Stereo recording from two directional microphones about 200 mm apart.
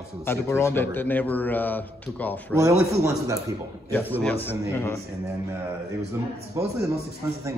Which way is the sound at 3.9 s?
10° left (ahead or behind).